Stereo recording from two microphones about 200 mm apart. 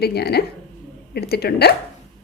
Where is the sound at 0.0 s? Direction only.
55° left (ahead or behind).